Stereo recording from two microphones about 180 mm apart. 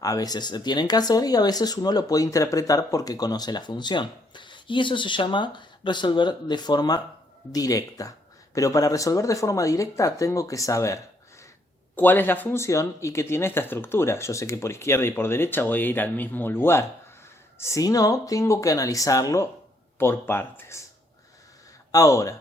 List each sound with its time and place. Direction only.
0.0 s speech: 20° left (ahead or behind)
21.9 s speech: 20° left (ahead or behind)